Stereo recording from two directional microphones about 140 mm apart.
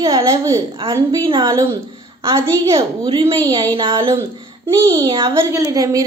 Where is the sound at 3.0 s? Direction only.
40° right (ahead or behind).